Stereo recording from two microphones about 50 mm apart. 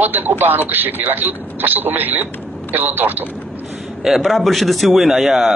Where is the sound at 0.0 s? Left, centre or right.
Right.